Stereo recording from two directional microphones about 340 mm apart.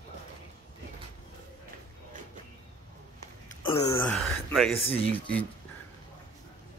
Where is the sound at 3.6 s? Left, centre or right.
Centre.